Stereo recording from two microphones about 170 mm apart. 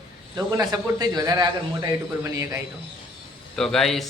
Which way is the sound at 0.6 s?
20° right (ahead or behind).